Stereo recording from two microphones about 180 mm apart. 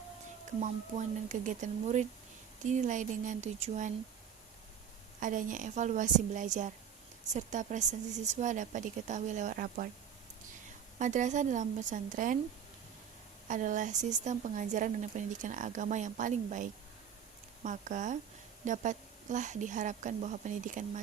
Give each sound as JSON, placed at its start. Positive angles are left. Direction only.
{"t": 0.6, "sound": "a woman's voice", "side_deg": -40}
{"t": 5.2, "sound": "a woman's voice", "side_deg": -45}
{"t": 10.9, "sound": "a woman's voice", "side_deg": -45}
{"t": 13.5, "sound": "a woman's voice", "side_deg": -45}